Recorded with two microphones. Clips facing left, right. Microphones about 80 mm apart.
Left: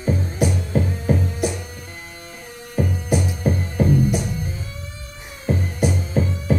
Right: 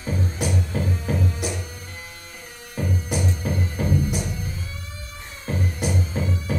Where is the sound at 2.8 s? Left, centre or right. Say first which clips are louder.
Left 5 dB; left.